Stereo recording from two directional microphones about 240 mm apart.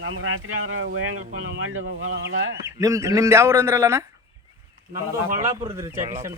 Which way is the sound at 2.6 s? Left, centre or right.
Centre.